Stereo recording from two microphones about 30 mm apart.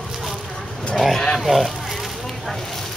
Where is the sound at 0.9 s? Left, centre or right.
Centre.